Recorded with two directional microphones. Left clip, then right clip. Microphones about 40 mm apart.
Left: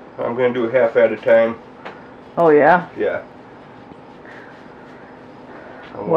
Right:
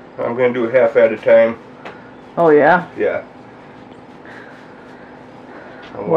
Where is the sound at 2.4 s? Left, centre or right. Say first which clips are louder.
Right 1 dB; left.